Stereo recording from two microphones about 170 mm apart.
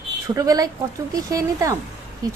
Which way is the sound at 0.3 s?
20° right (ahead or behind).